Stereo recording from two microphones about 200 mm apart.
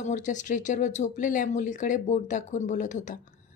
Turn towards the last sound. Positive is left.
turn(degrees=40)  # may be behind; listen again after turning